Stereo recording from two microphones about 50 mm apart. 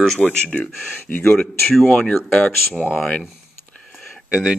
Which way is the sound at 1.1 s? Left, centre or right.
Left.